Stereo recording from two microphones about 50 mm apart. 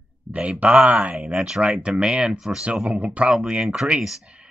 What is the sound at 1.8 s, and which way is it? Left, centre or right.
Speech, centre.